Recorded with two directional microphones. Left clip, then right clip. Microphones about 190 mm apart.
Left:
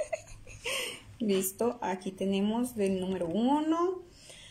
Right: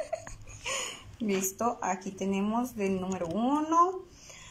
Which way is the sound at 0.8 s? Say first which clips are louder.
Left 1 dB; 40° left (ahead or behind).